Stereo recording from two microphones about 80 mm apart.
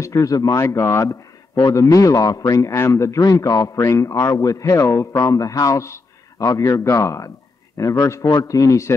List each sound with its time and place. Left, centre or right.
0.0 s a man's voice: left
8.3 s a man's voice: left